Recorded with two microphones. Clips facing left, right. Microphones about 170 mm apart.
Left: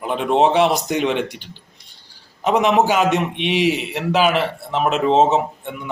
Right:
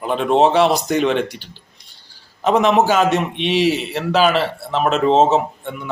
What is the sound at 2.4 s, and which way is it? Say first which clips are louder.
Speech: right 1 dB; 15° left (ahead or behind).